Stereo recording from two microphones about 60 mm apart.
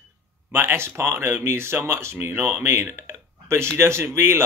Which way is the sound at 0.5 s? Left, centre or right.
Right.